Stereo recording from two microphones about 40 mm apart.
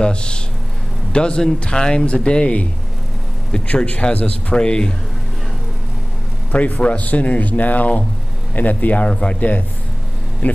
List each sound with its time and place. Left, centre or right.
0.0 s speech: left
3.5 s speech: left
6.5 s speech: left
9.1 s speech: left
10.4 s speech: left